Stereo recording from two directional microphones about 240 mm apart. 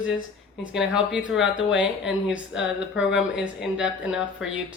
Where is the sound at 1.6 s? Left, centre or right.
Left.